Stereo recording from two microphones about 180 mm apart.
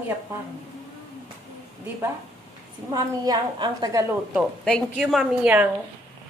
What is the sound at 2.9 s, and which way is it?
A woman's voice, 25° right (ahead or behind).